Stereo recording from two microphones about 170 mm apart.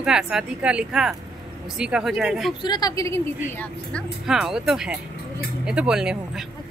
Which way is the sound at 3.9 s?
5° right (ahead or behind).